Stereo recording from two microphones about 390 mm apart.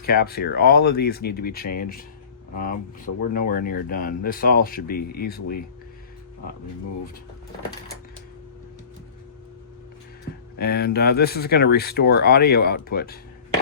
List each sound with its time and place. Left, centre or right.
0.0 s speech: left
10.6 s speech: left